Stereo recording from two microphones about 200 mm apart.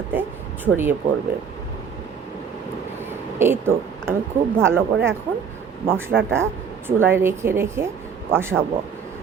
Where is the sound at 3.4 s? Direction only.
10° right (ahead or behind).